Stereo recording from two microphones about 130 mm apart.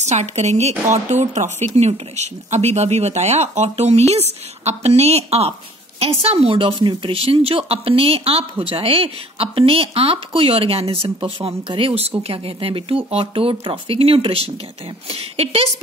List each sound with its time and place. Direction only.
0.0 s a woman's voice: 60° right (ahead or behind)